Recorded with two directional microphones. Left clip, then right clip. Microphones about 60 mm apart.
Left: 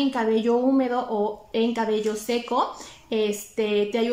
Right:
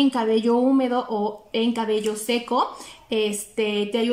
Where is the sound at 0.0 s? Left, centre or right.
Right.